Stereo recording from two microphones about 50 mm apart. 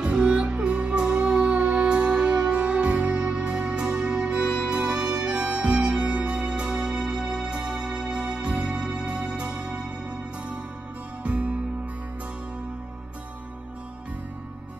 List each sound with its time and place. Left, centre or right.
0.0 s music: centre
11.2 s music: right